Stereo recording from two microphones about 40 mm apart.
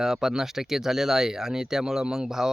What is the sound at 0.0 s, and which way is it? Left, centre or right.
Speech, centre.